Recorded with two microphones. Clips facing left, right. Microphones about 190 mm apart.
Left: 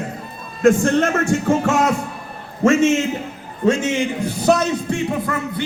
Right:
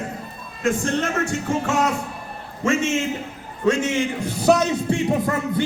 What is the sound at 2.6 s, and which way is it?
Speech, 45° left (ahead or behind).